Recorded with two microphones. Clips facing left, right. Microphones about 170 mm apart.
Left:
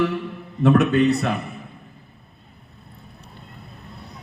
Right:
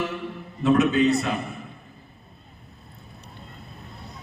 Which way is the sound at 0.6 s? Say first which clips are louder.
Left 2 dB; 60° left (ahead or behind).